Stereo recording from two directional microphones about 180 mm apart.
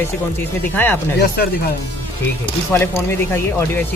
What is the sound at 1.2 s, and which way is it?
Speech, 55° left (ahead or behind).